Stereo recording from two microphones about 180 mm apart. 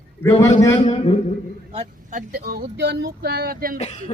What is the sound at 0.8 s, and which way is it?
Speech, 35° left (ahead or behind).